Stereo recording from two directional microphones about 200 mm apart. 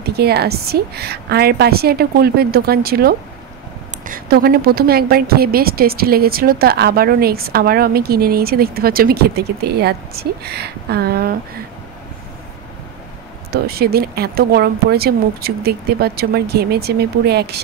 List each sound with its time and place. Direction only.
0.0 s a woman's voice: 55° right (ahead or behind)
13.5 s a woman's voice: 50° right (ahead or behind)